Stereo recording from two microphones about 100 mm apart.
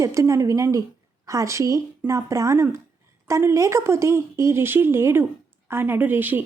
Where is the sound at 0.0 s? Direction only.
30° right (ahead or behind).